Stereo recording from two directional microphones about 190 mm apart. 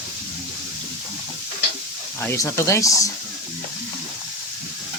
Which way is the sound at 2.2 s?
15° left (ahead or behind).